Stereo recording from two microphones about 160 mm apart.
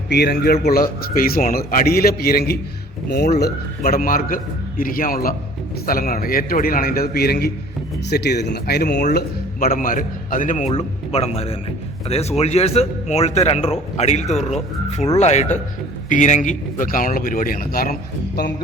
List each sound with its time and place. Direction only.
0.1 s a man's voice: 90° left; by 2.6 s 75° left (ahead or behind)
3.1 s speech: 90° left
3.4 s a man's voice: 70° left (ahead or behind)
8.0 s speech: 90° left
9.1 s a man's voice: 65° left (ahead or behind)